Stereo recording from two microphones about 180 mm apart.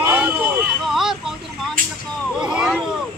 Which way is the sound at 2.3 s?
5° right (ahead or behind).